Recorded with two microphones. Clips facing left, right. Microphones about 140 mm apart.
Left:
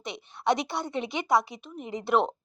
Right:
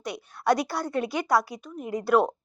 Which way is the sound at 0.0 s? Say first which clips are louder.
Right 1 dB; 25° left (ahead or behind).